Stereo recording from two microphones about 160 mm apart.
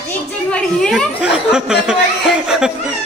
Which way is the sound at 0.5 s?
5° left (ahead or behind).